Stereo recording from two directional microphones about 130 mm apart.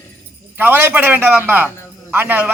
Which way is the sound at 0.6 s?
15° right (ahead or behind).